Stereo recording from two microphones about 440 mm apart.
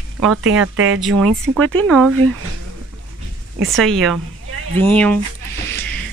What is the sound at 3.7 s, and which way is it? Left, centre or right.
Speech, centre.